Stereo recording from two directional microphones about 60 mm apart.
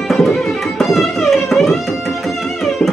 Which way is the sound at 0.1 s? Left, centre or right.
Centre.